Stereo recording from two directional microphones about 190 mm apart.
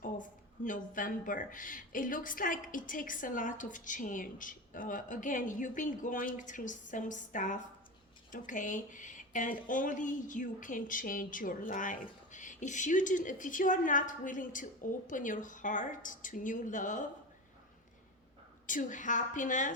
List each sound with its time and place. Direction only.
0.6 s speech: 45° left (ahead or behind)
18.6 s speech: 45° left (ahead or behind)